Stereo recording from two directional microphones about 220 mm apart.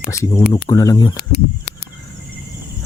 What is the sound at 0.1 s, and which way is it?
Speech, 15° left (ahead or behind).